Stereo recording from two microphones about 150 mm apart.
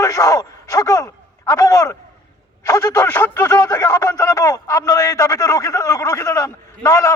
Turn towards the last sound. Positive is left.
turn(degrees=20)  # may be behind; listen again after turning